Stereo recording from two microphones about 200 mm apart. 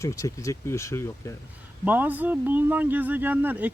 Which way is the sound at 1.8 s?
10° right (ahead or behind).